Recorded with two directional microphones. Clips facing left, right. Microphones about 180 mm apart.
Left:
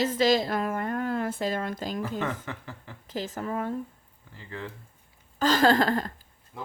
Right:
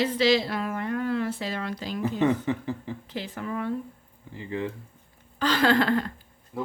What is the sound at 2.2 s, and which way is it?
Speech, 20° right (ahead or behind).